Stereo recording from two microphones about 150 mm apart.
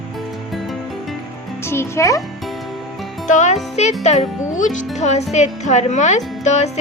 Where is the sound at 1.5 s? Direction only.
15° left (ahead or behind).